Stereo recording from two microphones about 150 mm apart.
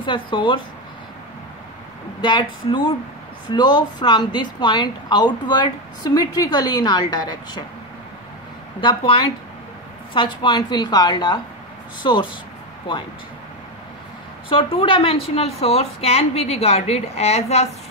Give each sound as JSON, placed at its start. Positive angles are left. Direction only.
{"t": 0.0, "sound": "speech", "side_deg": 35}
{"t": 2.2, "sound": "speech", "side_deg": 30}
{"t": 8.8, "sound": "speech", "side_deg": 35}
{"t": 14.5, "sound": "a woman's voice", "side_deg": 35}